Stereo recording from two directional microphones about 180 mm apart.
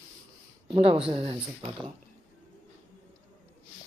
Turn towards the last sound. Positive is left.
turn(degrees=-30)  # may be behind; listen again after turning